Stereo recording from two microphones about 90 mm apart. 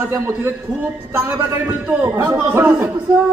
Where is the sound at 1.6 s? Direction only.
20° right (ahead or behind).